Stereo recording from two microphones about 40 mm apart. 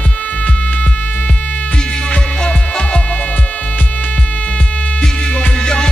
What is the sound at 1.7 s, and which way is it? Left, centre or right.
Music, centre.